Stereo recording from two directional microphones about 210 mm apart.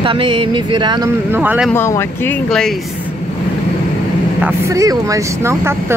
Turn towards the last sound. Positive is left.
turn(degrees=-15)  # may be behind; listen again after turning